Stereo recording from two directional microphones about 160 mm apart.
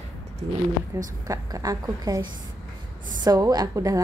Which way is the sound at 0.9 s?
15° right (ahead or behind).